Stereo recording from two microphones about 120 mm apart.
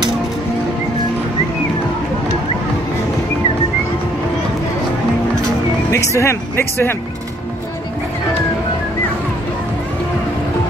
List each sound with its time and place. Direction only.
5.9 s speech: 25° left (ahead or behind)